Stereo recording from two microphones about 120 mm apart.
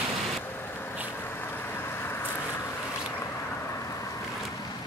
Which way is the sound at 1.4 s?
20° left (ahead or behind).